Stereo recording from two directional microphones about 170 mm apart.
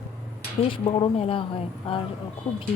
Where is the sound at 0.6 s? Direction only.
30° left (ahead or behind).